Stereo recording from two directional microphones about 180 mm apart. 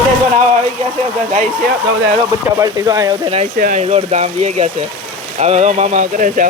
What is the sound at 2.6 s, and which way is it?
Speech, 20° right (ahead or behind).